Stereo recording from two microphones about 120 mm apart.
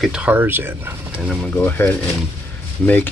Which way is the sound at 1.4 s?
10° left (ahead or behind).